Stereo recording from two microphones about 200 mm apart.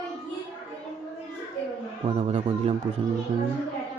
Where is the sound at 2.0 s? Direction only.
30° right (ahead or behind).